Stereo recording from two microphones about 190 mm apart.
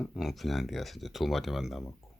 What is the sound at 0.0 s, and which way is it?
Speech, centre (ahead or behind).